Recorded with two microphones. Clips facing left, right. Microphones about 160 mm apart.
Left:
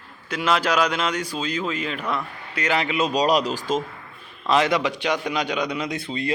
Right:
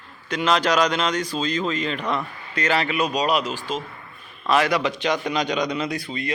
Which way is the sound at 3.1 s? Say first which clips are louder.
Left 2 dB; 35° left (ahead or behind).